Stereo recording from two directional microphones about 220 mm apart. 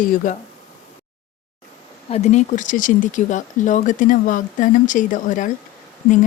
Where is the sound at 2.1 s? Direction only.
30° left (ahead or behind).